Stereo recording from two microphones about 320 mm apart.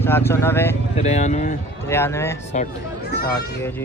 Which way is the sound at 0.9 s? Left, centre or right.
Left.